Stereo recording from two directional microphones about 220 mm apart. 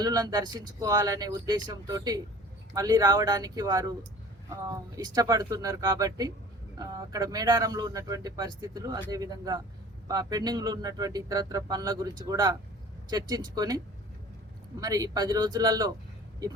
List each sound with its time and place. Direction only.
0.0 s speech: 15° right (ahead or behind)